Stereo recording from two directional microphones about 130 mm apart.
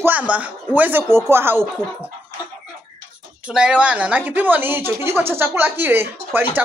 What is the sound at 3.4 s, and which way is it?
Speech, 5° right (ahead or behind).